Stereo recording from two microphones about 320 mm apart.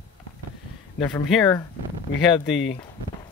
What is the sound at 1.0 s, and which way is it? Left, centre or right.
Speech, centre.